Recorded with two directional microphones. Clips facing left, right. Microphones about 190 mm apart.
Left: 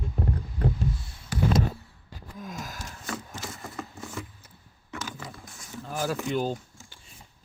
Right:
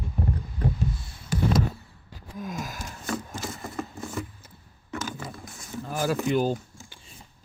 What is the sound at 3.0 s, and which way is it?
Wood, 45° right (ahead or behind).